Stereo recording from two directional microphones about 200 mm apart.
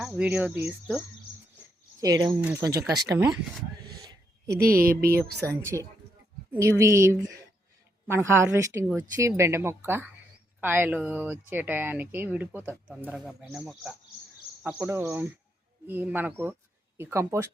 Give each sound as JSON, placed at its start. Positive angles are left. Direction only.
{"t": 0.0, "sound": "speech", "side_deg": -5}
{"t": 2.0, "sound": "speech", "side_deg": -20}
{"t": 4.6, "sound": "speech", "side_deg": -45}
{"t": 5.5, "sound": "speech", "side_deg": -15}